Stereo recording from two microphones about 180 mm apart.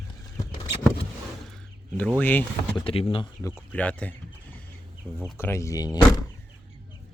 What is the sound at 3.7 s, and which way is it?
Speech, 5° left (ahead or behind).